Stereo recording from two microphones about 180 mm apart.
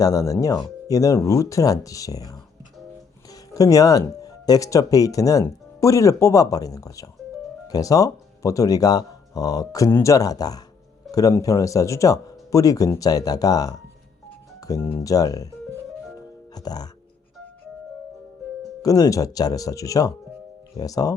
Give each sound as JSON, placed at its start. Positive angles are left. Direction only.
{"t": 0.0, "sound": "speech", "side_deg": 20}
{"t": 16.6, "sound": "speech", "side_deg": 20}
{"t": 18.8, "sound": "speech", "side_deg": 20}